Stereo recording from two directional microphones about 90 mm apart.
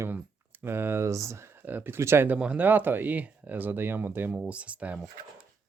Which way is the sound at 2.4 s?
15° right (ahead or behind).